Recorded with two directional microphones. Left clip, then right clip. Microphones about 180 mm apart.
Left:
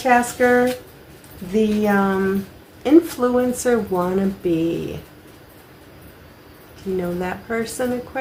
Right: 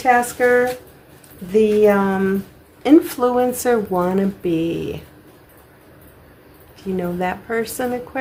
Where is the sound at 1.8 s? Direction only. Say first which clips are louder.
Right 4 dB; 55° right (ahead or behind).